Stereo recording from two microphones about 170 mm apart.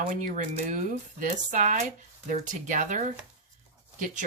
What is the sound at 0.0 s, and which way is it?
Speech, 50° right (ahead or behind).